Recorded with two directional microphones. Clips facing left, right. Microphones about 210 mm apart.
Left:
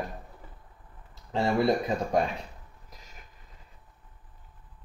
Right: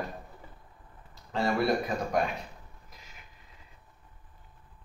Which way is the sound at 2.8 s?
40° left (ahead or behind).